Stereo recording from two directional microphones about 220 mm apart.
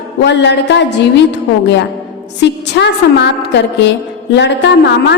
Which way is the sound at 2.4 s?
50° left (ahead or behind).